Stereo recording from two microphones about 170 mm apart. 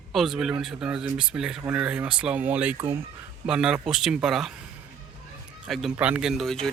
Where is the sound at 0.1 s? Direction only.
Centre (ahead or behind).